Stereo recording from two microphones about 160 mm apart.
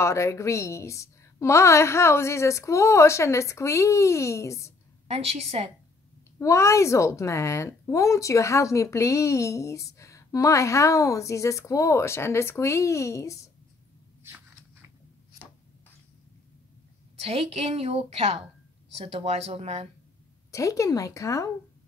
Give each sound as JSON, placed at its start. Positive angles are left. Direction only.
{"t": 0.0, "sound": "a woman's voice", "side_deg": 20}
{"t": 5.0, "sound": "a woman's voice", "side_deg": -40}
{"t": 6.4, "sound": "speech", "side_deg": 20}
{"t": 14.2, "sound": "a sound", "side_deg": -15}
{"t": 17.2, "sound": "a woman's voice", "side_deg": -40}
{"t": 20.5, "sound": "speech", "side_deg": 20}